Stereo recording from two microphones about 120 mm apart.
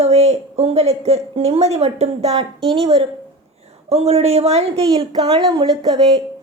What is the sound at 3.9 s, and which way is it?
Speech, 60° right (ahead or behind).